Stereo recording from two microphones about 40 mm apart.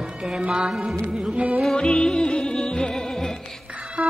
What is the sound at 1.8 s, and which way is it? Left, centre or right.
Music, left.